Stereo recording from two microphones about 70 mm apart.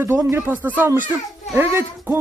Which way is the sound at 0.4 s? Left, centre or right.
Right.